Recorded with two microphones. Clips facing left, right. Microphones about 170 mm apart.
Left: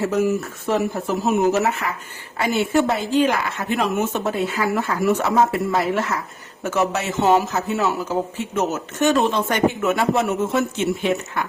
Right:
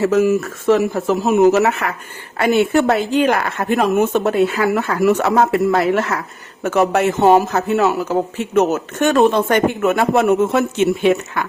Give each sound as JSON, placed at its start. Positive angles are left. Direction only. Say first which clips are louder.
{"t": 0.0, "sound": "a woman's voice", "louder": "right 5 dB", "side_deg": -90}